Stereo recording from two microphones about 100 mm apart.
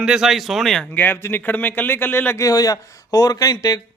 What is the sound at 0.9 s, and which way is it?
Speech, 20° left (ahead or behind).